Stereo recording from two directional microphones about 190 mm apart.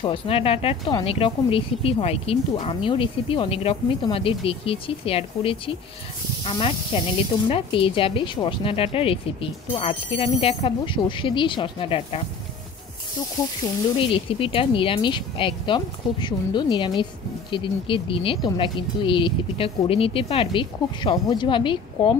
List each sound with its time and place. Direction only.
0.0 s speech: 30° left (ahead or behind)
14.1 s speech: 30° left (ahead or behind)